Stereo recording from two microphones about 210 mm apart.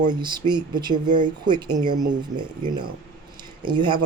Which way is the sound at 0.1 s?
20° right (ahead or behind).